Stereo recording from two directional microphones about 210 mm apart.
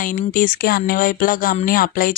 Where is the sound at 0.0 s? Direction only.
40° left (ahead or behind).